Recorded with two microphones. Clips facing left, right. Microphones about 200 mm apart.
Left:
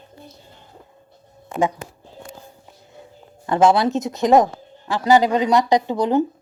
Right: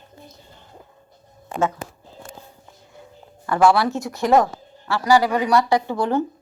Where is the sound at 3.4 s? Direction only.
20° left (ahead or behind).